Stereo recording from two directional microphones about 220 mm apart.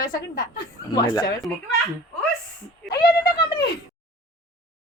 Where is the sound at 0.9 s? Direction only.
20° left (ahead or behind).